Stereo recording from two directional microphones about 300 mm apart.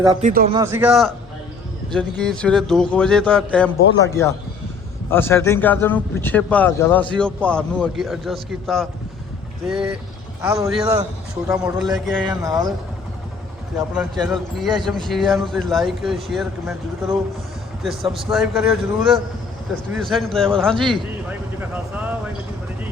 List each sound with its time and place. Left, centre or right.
0.2 s speech: right
0.5 s a man's voice: centre
12.3 s a man's voice: centre
13.7 s a man's voice: centre